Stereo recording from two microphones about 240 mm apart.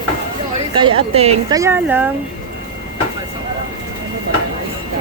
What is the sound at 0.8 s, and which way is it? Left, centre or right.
Speech, right.